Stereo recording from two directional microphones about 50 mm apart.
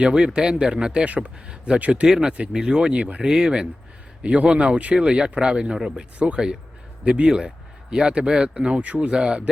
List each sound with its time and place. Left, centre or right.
0.0 s speech: centre
1.0 s speech: right
1.5 s speech: centre
2.0 s speech: centre
3.2 s speech: centre
6.1 s speech: right